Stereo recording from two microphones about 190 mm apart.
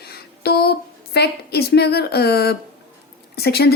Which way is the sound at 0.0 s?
55° left (ahead or behind).